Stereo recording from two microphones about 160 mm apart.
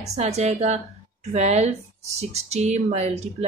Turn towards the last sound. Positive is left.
turn(degrees=-45)  # may be behind; listen again after turning